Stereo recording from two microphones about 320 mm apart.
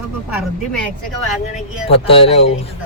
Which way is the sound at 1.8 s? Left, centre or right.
Centre.